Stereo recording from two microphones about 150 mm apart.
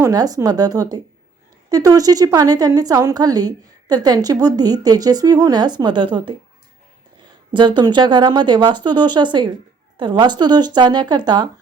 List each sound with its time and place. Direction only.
0.0 s a woman's voice: 25° right (ahead or behind)
7.5 s a woman's voice: 30° right (ahead or behind)